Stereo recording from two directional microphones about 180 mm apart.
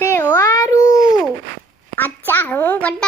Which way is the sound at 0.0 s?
15° left (ahead or behind).